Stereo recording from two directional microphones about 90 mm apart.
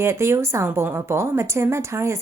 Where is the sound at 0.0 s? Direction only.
30° right (ahead or behind).